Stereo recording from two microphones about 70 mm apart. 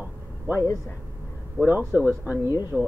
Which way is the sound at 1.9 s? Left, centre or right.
Right.